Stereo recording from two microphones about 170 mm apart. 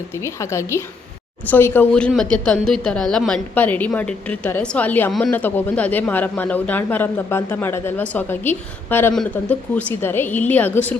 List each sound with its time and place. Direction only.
0.2 s speech: 15° left (ahead or behind)